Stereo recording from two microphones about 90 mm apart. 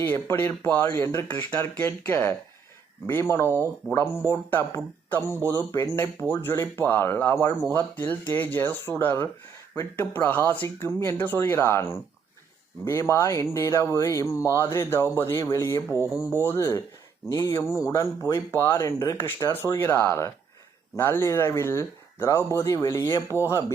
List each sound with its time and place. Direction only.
0.0 s speech: 25° left (ahead or behind)